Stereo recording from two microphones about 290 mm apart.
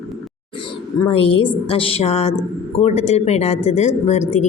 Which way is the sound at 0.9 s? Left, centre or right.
Centre.